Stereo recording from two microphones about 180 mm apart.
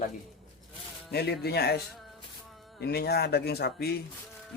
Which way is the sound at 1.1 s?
65° left (ahead or behind).